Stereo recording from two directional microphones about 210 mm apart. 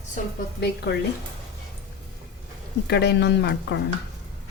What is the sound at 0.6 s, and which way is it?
Speech, 50° left (ahead or behind).